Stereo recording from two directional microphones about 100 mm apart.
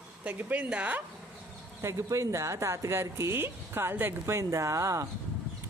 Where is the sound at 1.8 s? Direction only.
30° right (ahead or behind).